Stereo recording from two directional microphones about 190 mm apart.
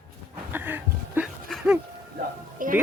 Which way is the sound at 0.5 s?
10° right (ahead or behind).